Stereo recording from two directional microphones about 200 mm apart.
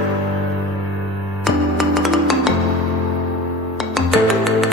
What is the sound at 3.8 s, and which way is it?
Music, centre (ahead or behind).